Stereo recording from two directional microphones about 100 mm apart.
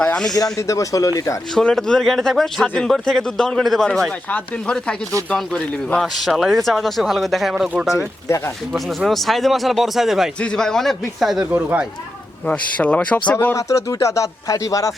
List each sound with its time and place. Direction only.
0.0 s a sound: 10° left (ahead or behind)
0.5 s a man's voice: 30° left (ahead or behind)
1.5 s speech: 5° left (ahead or behind)
8.3 s speech: 30° left (ahead or behind)
8.7 s speech: centre (ahead or behind)
10.4 s speech: 5° left (ahead or behind)
11.5 s speech: 15° right (ahead or behind)
12.5 s speech: 15° left (ahead or behind)
13.3 s a man's voice: 25° left (ahead or behind)